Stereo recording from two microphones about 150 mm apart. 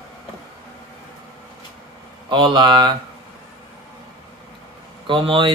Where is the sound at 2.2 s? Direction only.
30° right (ahead or behind).